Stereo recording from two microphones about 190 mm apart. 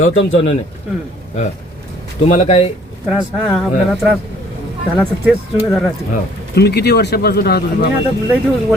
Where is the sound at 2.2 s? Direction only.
40° left (ahead or behind).